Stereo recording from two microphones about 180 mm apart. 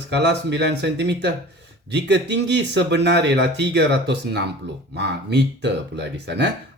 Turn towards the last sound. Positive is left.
turn(degrees=-70)  # may be behind; listen again after turning